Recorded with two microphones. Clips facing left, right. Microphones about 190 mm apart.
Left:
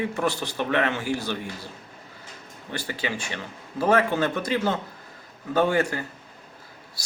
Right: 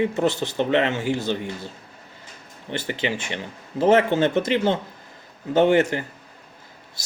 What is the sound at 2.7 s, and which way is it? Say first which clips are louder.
Speech: right 4 dB; 20° right (ahead or behind).